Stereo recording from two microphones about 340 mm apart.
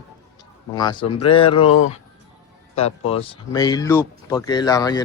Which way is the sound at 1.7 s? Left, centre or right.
Left.